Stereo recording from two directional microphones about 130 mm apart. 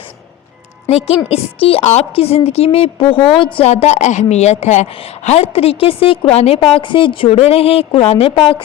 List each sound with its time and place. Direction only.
0.9 s a woman's voice: 50° left (ahead or behind)
6.7 s a woman's voice: 40° left (ahead or behind)